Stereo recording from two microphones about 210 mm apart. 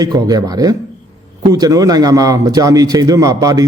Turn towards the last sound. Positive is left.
turn(degrees=-15)  # may be behind; listen again after turning